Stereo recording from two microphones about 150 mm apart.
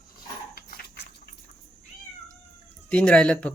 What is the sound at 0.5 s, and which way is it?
Horse, 90° left.